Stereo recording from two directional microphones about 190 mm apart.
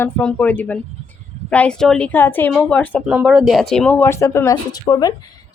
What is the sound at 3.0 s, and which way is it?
Speech, 5° right (ahead or behind).